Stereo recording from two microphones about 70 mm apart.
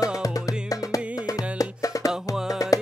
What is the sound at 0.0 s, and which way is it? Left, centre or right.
Music, left.